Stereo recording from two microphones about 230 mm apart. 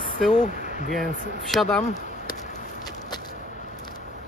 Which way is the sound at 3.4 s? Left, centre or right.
Left.